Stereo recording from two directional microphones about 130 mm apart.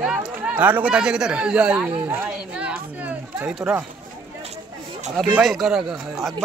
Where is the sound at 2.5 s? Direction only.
10° right (ahead or behind).